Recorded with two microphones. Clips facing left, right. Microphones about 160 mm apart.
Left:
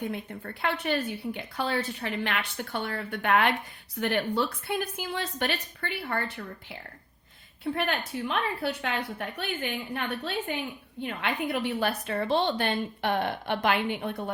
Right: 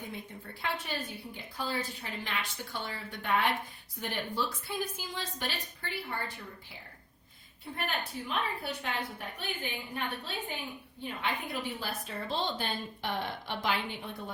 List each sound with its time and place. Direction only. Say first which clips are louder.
0.0 s a woman's voice: left 8 dB; 65° left (ahead or behind)